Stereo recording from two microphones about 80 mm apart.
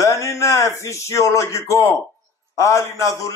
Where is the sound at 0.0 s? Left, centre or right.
Left.